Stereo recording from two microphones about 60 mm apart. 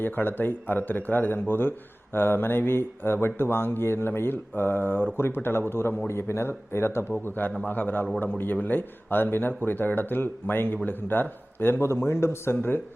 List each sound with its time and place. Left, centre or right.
0.0 s speech: left
7.3 s speech: left